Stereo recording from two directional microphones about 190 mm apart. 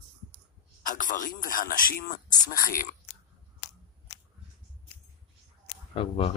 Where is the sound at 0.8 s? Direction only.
45° left (ahead or behind).